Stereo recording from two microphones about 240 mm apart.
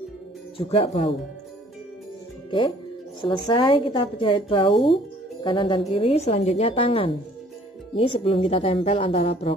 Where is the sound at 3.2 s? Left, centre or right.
Centre.